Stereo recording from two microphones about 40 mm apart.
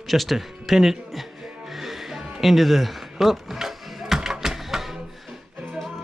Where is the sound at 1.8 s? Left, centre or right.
Centre.